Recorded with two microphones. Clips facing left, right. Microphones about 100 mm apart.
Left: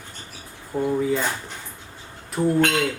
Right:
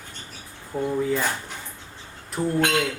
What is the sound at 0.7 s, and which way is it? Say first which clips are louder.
Speech: left 2 dB; 20° left (ahead or behind).